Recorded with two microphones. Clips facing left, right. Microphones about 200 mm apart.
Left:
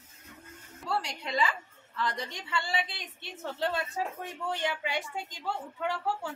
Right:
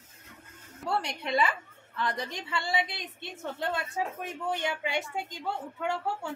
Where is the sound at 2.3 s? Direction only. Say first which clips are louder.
Right 2 dB; 20° right (ahead or behind).